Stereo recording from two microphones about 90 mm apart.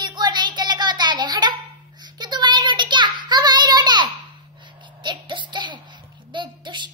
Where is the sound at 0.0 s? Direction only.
55° right (ahead or behind).